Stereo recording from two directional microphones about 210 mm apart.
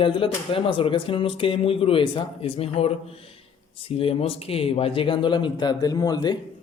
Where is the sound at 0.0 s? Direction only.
25° left (ahead or behind).